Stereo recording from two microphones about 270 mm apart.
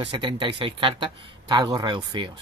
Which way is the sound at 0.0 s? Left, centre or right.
Centre.